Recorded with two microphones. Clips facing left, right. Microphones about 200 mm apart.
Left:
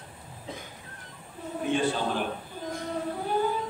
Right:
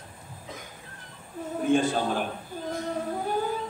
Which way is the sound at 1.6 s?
45° right (ahead or behind).